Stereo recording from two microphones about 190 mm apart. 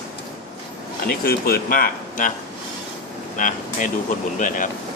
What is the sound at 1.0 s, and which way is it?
Speech, 55° left (ahead or behind).